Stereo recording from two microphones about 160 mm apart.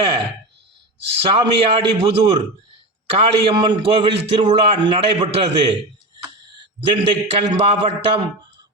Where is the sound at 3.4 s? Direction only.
30° right (ahead or behind).